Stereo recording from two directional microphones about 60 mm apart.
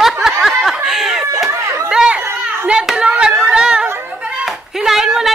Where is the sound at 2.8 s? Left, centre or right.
Centre.